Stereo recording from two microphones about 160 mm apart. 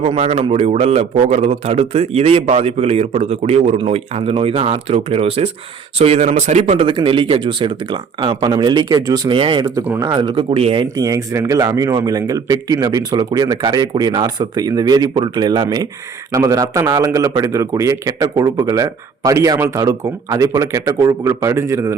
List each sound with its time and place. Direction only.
0.0 s a man's voice: 40° right (ahead or behind)
10.9 s a man's voice: 20° right (ahead or behind)